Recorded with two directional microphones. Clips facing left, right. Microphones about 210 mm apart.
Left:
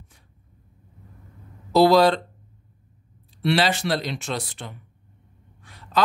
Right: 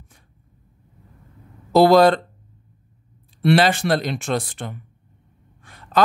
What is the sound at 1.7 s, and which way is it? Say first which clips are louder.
Speech: right 3 dB; 50° right (ahead or behind).